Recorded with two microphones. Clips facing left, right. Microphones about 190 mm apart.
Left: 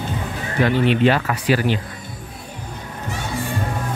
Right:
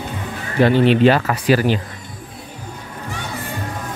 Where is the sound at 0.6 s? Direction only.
35° right (ahead or behind).